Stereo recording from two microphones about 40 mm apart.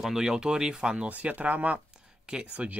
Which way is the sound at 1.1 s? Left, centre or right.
Right.